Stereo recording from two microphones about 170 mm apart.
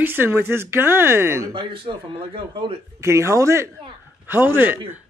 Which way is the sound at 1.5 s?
30° right (ahead or behind).